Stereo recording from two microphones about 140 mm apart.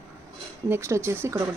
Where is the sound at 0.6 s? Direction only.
20° right (ahead or behind).